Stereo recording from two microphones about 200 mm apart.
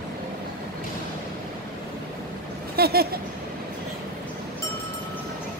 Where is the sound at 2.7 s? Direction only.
50° right (ahead or behind).